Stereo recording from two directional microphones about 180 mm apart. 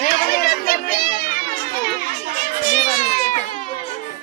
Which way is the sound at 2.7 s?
40° left (ahead or behind).